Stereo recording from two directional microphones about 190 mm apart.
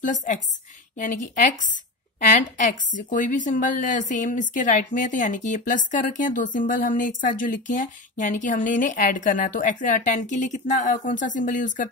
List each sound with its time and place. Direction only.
0.0 s a woman's voice: 40° left (ahead or behind)